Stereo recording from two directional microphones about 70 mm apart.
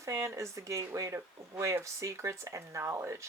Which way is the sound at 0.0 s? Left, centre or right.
Right.